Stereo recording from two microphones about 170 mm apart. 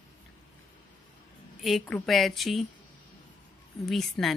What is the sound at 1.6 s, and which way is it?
A woman's voice, 5° left (ahead or behind).